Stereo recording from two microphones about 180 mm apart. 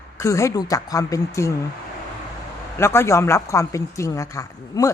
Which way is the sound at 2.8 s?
15° left (ahead or behind).